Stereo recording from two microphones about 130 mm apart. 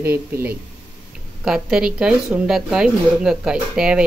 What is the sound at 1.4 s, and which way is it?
Speech, 5° right (ahead or behind).